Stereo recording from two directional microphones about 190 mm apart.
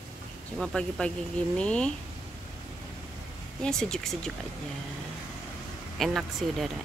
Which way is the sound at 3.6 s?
Centre (ahead or behind).